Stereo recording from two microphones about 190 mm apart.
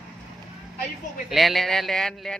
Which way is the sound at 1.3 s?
Centre (ahead or behind).